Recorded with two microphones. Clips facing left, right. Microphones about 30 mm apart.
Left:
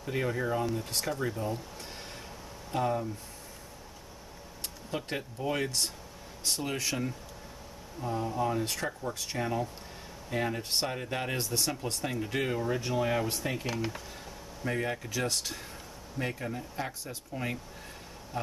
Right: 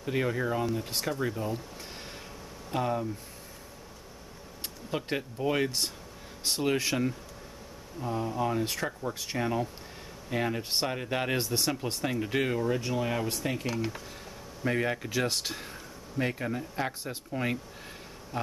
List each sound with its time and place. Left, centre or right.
0.0 s speech: centre
2.7 s speech: centre
4.9 s speech: centre
8.0 s speech: centre
14.6 s speech: centre